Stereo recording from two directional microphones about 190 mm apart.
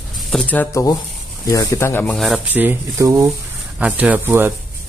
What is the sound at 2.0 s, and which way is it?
Speech, centre (ahead or behind).